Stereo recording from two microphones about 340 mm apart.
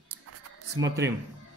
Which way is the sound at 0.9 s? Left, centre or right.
Centre.